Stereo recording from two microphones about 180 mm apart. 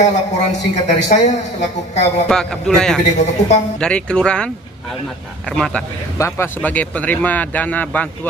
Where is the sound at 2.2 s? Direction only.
5° left (ahead or behind).